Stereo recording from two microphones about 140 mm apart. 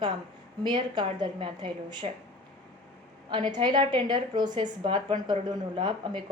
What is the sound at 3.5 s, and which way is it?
A woman's voice, 30° right (ahead or behind).